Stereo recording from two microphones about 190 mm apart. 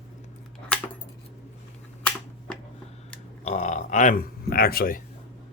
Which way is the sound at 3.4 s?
35° left (ahead or behind).